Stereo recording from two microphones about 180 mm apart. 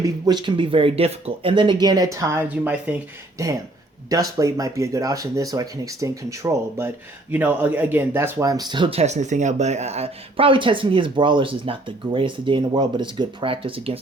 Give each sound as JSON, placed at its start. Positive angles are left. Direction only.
{"t": 0.0, "sound": "speech", "side_deg": -25}